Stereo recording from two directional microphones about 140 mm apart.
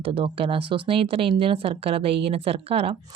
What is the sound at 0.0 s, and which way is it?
Speech, 40° right (ahead or behind).